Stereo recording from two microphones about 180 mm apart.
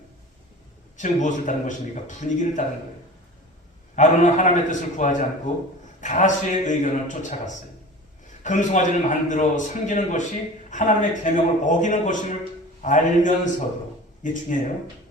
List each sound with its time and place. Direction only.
0.9 s a man's voice: 45° left (ahead or behind)
3.9 s a man's voice: 45° left (ahead or behind)